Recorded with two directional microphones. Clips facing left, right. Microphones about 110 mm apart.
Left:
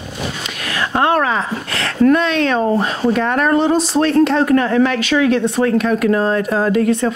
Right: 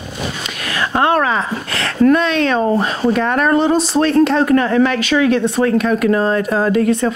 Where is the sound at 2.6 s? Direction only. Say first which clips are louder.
Right 1 dB; 30° right (ahead or behind).